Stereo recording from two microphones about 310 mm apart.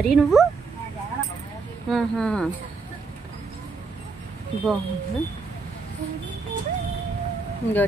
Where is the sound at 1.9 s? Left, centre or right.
Centre.